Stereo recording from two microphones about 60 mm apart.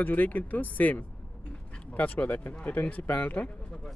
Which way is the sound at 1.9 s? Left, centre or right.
Left.